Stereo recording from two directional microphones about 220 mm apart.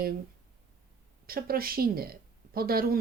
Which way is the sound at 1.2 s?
45° right (ahead or behind).